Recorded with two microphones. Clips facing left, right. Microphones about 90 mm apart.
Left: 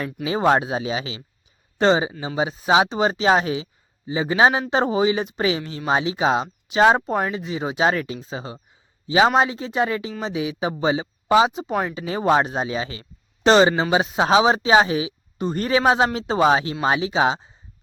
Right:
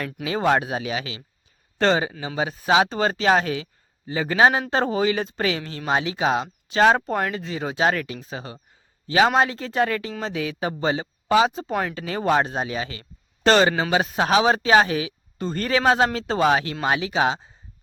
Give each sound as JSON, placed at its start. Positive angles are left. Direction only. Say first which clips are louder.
{"t": 0.3, "sound": "speech", "louder": "left 2 dB", "side_deg": 25}
{"t": 11.7, "sound": "speech", "louder": "left 2 dB", "side_deg": 5}
{"t": 11.9, "sound": "speech", "louder": "left 3 dB", "side_deg": 20}